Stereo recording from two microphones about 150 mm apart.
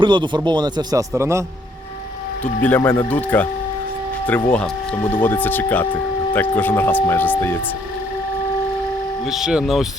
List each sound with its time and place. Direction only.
0.0 s a man's voice: 30° right (ahead or behind)
2.4 s speech: 10° left (ahead or behind)
9.2 s speech: centre (ahead or behind)